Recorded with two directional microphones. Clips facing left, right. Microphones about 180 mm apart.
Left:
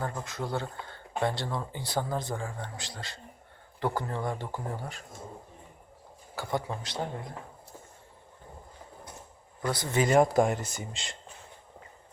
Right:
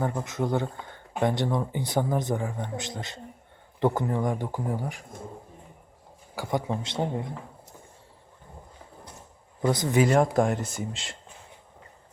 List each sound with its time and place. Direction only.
0.0 s speech: 20° right (ahead or behind)
6.3 s speech: 15° right (ahead or behind)
9.6 s speech: 20° right (ahead or behind)
10.0 s speech: centre (ahead or behind)